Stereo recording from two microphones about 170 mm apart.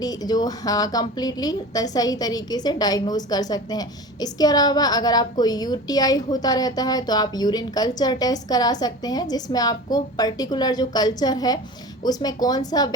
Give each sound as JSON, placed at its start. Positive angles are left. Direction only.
{"t": 0.0, "sound": "a woman's voice", "side_deg": 20}